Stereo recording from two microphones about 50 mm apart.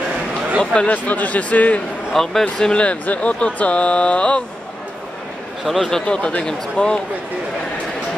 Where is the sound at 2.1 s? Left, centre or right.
Centre.